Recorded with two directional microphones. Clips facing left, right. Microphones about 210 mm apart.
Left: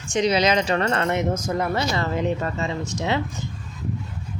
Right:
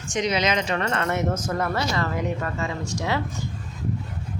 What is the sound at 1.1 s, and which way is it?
Speech, 15° left (ahead or behind).